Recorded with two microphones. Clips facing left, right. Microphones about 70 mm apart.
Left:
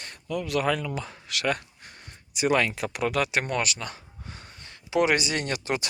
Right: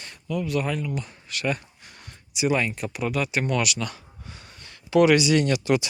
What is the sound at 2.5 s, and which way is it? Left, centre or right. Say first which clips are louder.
Speech: left 1 dB; left.